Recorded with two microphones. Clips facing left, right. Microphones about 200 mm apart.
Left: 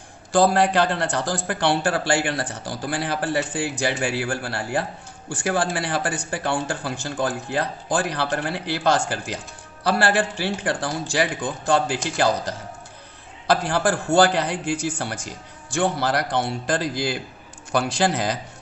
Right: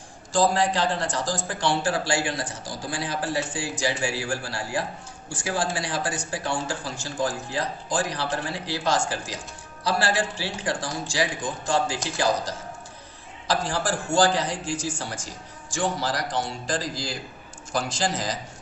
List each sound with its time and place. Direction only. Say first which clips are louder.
0.3 s speech: left 4 dB; 60° left (ahead or behind)